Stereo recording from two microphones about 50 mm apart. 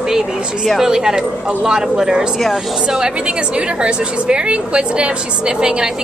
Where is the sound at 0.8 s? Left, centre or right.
Centre.